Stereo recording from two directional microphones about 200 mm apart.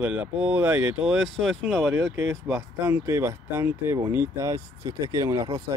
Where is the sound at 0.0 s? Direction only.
5° right (ahead or behind).